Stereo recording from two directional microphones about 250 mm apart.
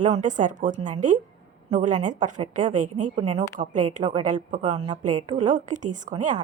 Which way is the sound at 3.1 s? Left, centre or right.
Right.